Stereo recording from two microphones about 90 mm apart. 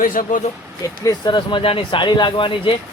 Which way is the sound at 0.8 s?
45° left (ahead or behind).